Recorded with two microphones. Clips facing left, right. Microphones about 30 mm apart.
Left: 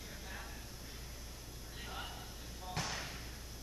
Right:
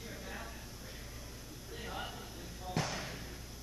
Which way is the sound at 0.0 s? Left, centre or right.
Centre.